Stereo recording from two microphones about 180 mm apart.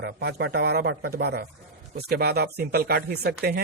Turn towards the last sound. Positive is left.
turn(degrees=-60)  # may be behind; listen again after turning